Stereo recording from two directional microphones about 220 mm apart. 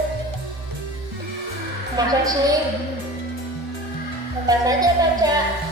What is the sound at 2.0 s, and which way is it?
Speech, 15° right (ahead or behind).